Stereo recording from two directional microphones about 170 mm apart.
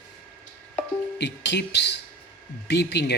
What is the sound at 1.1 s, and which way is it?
Speech, 90° left.